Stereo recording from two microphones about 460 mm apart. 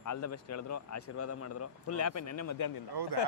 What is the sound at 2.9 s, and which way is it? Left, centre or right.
Speech, right.